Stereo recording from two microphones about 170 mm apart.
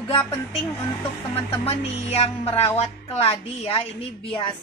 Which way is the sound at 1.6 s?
35° left (ahead or behind).